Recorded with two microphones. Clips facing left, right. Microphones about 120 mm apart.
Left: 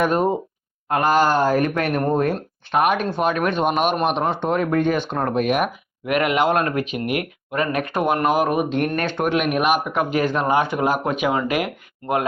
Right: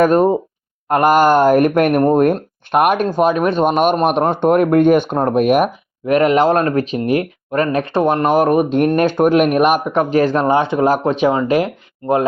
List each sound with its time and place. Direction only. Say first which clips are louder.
0.0 s speech: right 7 dB; 45° right (ahead or behind)
7.5 s speech: right 6 dB; 40° right (ahead or behind)
7.8 s speech: right 4 dB; 25° right (ahead or behind)